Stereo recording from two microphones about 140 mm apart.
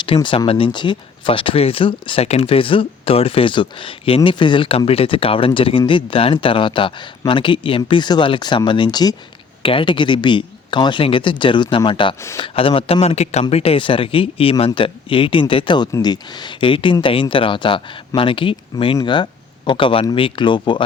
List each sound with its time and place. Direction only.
0.0 s speech: 35° left (ahead or behind)